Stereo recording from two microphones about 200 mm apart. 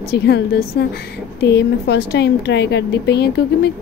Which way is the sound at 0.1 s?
55° left (ahead or behind).